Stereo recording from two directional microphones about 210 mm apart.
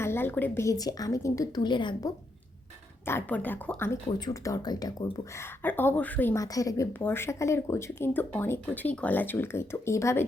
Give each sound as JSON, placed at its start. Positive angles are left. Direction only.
{"t": 0.0, "sound": "speech", "side_deg": 10}
{"t": 3.1, "sound": "speech", "side_deg": 10}